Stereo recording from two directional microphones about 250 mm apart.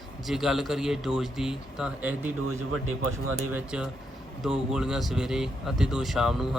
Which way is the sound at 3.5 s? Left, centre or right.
Centre.